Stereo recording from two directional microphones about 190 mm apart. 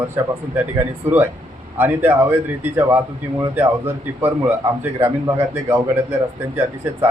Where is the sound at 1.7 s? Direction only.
10° right (ahead or behind).